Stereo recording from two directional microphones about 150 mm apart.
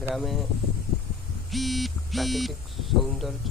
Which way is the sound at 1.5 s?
Centre (ahead or behind).